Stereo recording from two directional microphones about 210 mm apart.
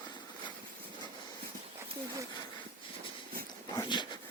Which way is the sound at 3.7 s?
20° left (ahead or behind).